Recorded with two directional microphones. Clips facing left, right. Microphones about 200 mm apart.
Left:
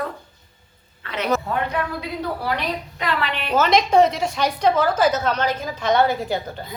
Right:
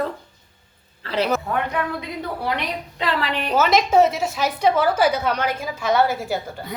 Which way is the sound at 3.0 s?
35° right (ahead or behind).